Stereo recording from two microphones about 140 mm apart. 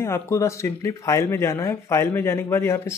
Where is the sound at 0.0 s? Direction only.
20° left (ahead or behind).